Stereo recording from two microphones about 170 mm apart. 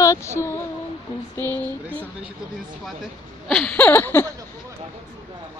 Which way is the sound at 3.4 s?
5° left (ahead or behind).